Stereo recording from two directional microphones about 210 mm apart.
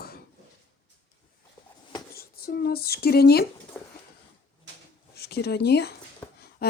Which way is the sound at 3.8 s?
10° left (ahead or behind).